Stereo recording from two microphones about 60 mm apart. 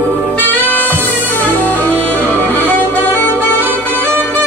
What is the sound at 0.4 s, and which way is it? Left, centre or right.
Music, left.